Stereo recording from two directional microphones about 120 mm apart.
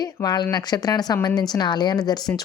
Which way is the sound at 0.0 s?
35° left (ahead or behind).